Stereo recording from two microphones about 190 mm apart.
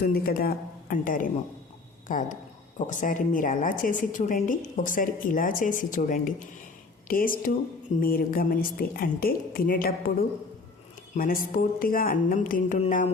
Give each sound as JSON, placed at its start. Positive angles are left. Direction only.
{"t": 0.0, "sound": "speech", "side_deg": 55}